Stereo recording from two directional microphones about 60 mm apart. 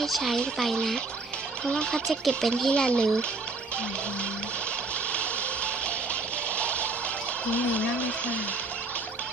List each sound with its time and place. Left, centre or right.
0.0 s fowl: centre
1.7 s speech: centre
2.0 s fowl: centre
2.6 s speech: centre
6.6 s music: left
7.5 s speech: left